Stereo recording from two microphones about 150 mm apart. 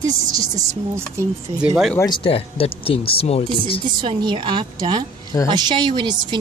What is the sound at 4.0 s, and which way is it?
A woman's voice, 30° right (ahead or behind).